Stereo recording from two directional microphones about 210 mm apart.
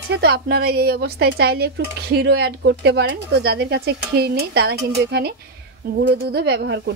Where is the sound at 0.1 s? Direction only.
50° right (ahead or behind).